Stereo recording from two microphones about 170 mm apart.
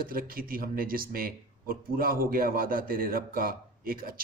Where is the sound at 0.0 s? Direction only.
60° right (ahead or behind).